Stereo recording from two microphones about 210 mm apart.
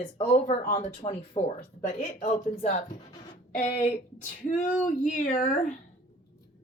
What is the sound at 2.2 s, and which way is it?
A woman's voice, 35° left (ahead or behind).